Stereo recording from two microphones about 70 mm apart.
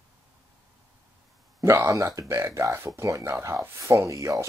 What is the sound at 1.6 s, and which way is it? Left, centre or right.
Speech, right.